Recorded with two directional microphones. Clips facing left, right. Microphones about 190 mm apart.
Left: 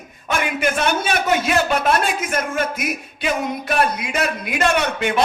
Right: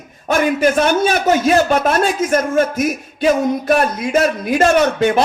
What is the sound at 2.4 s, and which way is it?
Music, 30° right (ahead or behind).